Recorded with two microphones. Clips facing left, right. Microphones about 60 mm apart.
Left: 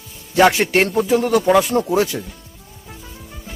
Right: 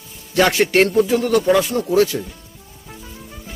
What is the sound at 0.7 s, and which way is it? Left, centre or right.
Speech, centre.